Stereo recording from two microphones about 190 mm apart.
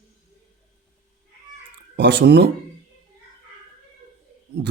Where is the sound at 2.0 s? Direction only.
65° right (ahead or behind).